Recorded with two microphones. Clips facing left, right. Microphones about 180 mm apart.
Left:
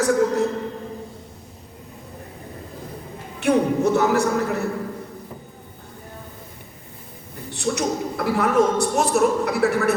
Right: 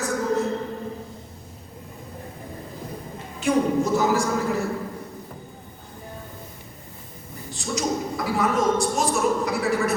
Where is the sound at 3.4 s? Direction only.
65° left (ahead or behind).